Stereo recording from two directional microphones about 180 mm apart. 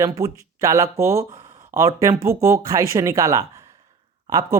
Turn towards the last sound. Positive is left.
turn(degrees=-20)  # may be behind; listen again after turning